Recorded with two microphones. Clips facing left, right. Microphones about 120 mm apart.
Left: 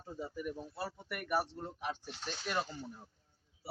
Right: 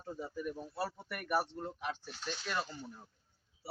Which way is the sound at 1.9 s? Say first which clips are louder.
Even; 25° left (ahead or behind).